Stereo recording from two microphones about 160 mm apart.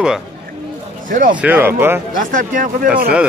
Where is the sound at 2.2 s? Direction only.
55° right (ahead or behind).